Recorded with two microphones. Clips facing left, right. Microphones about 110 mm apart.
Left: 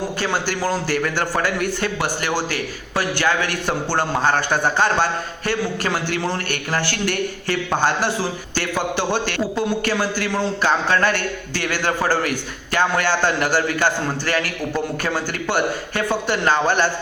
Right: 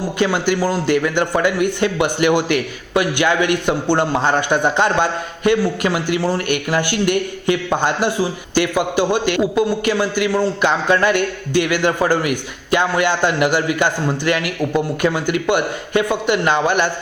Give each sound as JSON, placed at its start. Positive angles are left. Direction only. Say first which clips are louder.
{"t": 0.6, "sound": "a man's voice", "louder": "right 4 dB", "side_deg": -10}